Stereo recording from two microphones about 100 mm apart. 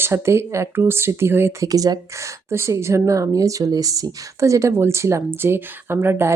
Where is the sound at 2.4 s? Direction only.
25° right (ahead or behind).